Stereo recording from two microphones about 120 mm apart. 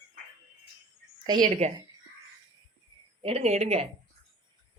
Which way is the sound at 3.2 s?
60° right (ahead or behind).